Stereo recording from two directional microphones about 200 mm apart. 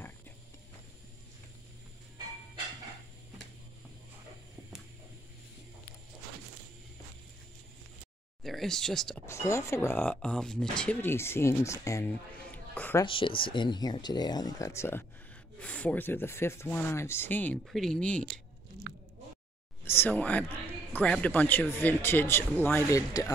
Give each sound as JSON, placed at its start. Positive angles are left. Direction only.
{"t": 8.5, "sound": "speech", "side_deg": 0}
{"t": 9.2, "sound": "speech", "side_deg": 15}
{"t": 13.0, "sound": "speech", "side_deg": 25}
{"t": 18.9, "sound": "biting", "side_deg": -50}
{"t": 19.8, "sound": "speech", "side_deg": 10}